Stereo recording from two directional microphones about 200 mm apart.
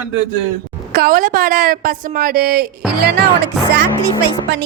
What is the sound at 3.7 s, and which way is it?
Speech, 55° right (ahead or behind).